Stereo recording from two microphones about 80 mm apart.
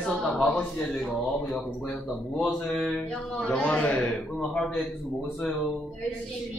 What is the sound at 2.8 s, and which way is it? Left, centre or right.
Speech, centre.